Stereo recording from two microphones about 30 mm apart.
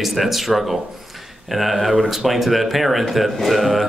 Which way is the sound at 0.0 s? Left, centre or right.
Centre.